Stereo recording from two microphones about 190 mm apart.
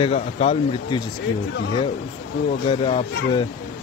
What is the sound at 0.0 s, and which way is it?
Speech, 30° left (ahead or behind).